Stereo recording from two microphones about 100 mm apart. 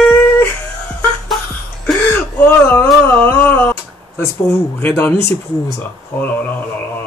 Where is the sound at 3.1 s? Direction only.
20° left (ahead or behind).